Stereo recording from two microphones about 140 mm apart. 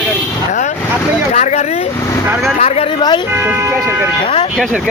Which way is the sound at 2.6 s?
45° left (ahead or behind).